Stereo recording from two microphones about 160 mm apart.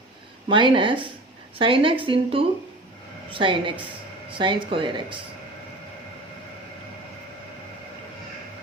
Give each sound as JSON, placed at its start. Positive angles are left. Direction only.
{"t": 0.4, "sound": "a woman's voice", "side_deg": -30}